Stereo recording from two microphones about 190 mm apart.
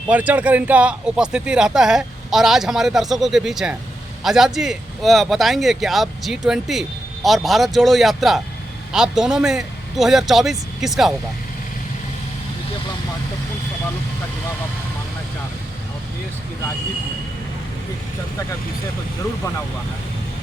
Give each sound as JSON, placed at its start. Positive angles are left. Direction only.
{"t": 0.1, "sound": "speech", "side_deg": -10}